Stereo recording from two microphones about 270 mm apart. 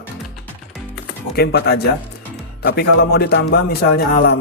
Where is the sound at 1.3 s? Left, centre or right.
Left.